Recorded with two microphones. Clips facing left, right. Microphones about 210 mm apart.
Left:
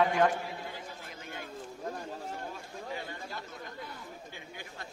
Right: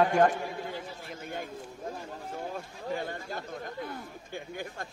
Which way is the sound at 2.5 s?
45° right (ahead or behind).